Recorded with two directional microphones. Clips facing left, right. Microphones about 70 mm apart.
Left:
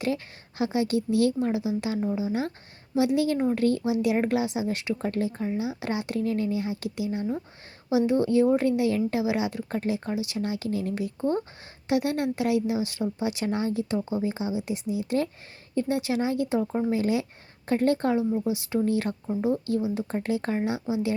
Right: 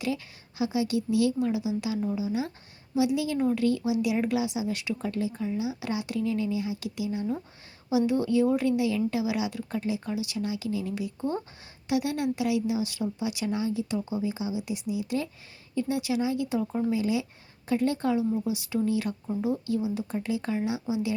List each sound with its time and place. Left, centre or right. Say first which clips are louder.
0.6 s a woman's voice: left 2 dB; left
16.9 s a woman's voice: left 2 dB; left
18.3 s speech: left 2 dB; left
18.9 s a woman's voice: left 2 dB; left